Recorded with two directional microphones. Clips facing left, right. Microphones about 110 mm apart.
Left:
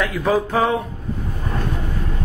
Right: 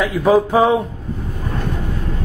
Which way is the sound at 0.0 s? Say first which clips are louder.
Right 5 dB; 10° right (ahead or behind).